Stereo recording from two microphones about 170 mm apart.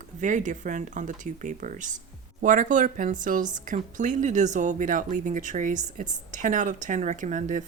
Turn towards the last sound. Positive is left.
turn(degrees=-50)  # may be behind; listen again after turning